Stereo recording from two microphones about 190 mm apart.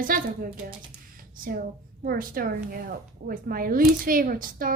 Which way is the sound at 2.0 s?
50° right (ahead or behind).